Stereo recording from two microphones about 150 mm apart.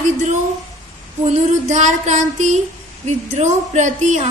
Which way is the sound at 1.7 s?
50° right (ahead or behind).